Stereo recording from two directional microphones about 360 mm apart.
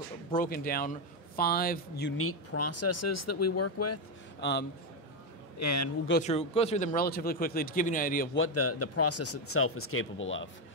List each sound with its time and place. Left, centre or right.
0.3 s a man's voice: left
4.4 s a man's voice: left
5.6 s speech: left
6.0 s speech: left
8.4 s a man's voice: left